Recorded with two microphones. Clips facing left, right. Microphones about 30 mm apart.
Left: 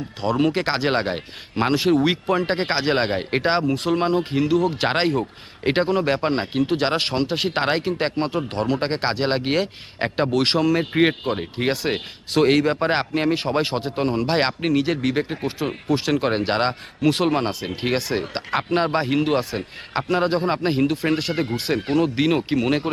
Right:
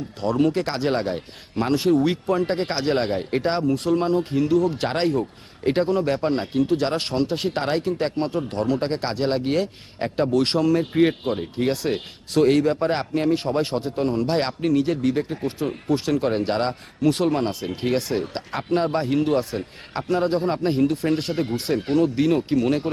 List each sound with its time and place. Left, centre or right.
0.3 s speech: left
4.2 s speech: left
7.6 s speech: left
10.9 s speech: left
13.3 s speech: left
14.8 s speech: left
15.2 s speech: left
15.9 s speech: left
16.5 s speech: left